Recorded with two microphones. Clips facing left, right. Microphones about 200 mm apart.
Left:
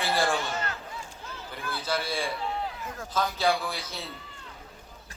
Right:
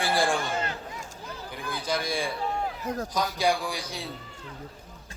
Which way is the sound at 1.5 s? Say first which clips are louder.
Right 1 dB; 15° right (ahead or behind).